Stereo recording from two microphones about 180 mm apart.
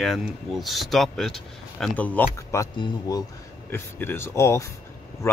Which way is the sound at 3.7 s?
10° left (ahead or behind).